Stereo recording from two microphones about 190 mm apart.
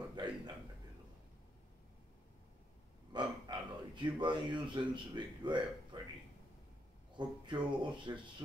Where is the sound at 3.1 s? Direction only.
25° right (ahead or behind).